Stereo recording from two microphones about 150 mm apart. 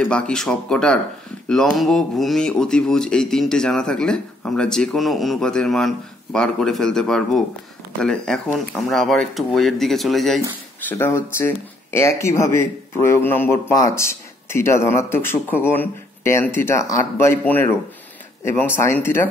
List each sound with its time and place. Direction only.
0.0 s speech: 5° left (ahead or behind)
10.9 s speech: 15° left (ahead or behind)